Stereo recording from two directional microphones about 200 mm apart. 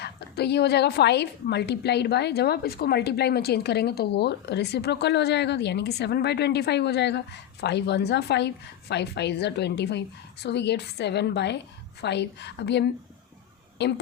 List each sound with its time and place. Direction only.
0.0 s a woman's voice: 55° left (ahead or behind)